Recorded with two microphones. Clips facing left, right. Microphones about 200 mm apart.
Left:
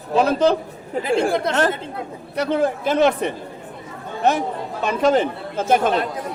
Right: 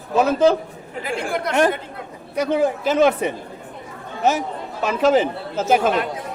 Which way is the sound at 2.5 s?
5° right (ahead or behind).